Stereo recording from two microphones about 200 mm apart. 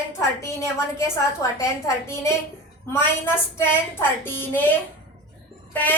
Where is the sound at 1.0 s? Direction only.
15° left (ahead or behind).